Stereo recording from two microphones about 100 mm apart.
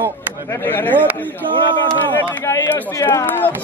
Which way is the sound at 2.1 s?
30° left (ahead or behind).